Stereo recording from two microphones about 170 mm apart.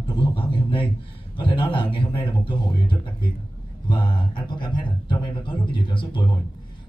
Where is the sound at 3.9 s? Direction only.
25° left (ahead or behind).